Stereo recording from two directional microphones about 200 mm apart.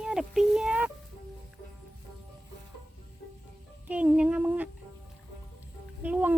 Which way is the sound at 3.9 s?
5° right (ahead or behind).